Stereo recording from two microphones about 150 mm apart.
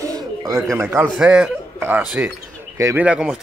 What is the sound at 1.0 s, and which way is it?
A man's voice, 5° right (ahead or behind).